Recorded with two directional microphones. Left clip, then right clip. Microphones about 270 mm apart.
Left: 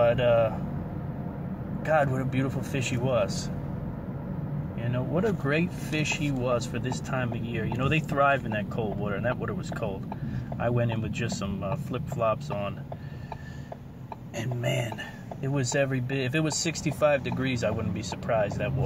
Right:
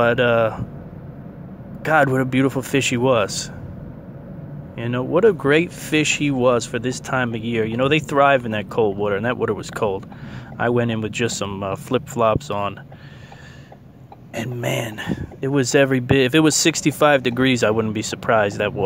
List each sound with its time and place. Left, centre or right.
0.0 s speech: right
1.8 s speech: right
4.7 s speech: right
14.3 s speech: right